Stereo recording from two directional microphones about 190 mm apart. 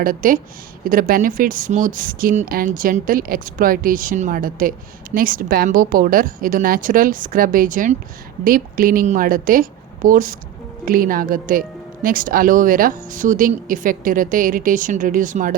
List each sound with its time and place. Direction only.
0.0 s a woman's voice: 45° right (ahead or behind)